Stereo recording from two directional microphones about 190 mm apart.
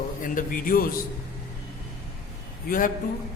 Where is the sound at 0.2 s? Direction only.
45° left (ahead or behind).